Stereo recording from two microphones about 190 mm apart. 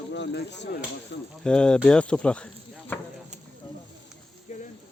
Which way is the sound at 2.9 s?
10° left (ahead or behind).